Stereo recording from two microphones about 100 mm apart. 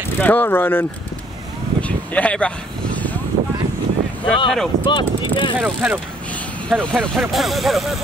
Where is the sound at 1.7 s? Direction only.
15° left (ahead or behind).